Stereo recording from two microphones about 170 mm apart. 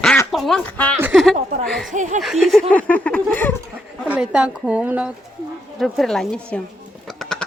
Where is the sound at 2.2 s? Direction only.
Centre (ahead or behind).